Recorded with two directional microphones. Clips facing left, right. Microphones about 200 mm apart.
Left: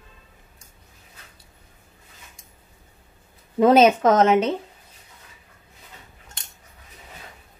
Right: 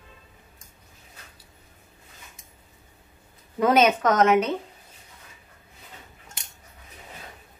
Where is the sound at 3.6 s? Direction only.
30° left (ahead or behind).